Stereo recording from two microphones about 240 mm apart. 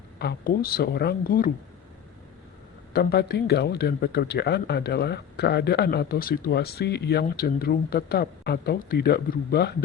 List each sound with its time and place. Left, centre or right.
0.2 s speech: left
2.9 s speech: left